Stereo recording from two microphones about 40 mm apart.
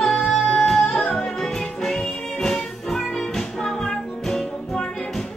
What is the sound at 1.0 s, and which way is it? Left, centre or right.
Music, left.